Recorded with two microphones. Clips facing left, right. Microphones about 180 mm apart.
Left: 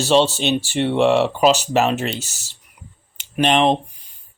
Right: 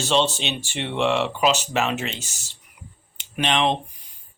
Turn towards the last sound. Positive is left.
turn(degrees=40)  # may be behind; listen again after turning